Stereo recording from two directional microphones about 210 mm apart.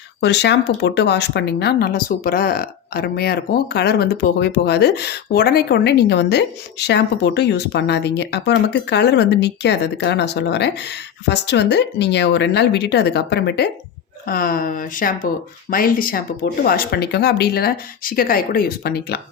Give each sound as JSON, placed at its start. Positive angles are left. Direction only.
{"t": 0.2, "sound": "speech", "side_deg": 55}